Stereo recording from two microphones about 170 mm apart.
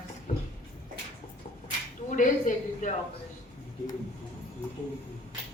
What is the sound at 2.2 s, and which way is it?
Speech, 45° left (ahead or behind).